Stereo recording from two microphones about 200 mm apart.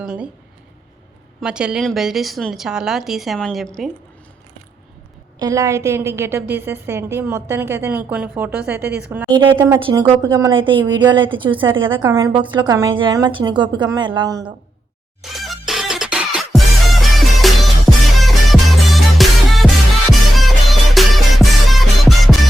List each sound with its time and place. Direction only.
0.0 s a woman's voice: 5° right (ahead or behind)
1.4 s a woman's voice: 5° right (ahead or behind)
5.4 s a woman's voice: 15° right (ahead or behind)
9.3 s a woman's voice: 25° right (ahead or behind)
9.6 s a woman's voice: 15° right (ahead or behind)
9.8 s a woman's voice: 25° right (ahead or behind)
11.9 s a woman's voice: 15° right (ahead or behind)
15.2 s music: centre (ahead or behind)